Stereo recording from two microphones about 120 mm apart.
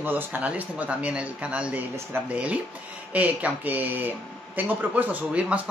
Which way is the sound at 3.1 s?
10° right (ahead or behind).